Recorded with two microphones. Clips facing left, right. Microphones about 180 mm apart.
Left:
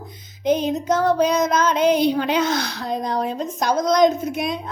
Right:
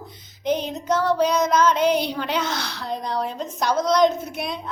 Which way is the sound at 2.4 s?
45° left (ahead or behind).